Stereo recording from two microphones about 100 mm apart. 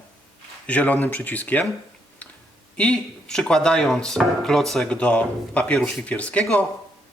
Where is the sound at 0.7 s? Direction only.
15° left (ahead or behind).